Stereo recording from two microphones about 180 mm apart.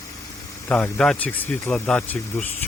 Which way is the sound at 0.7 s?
5° left (ahead or behind).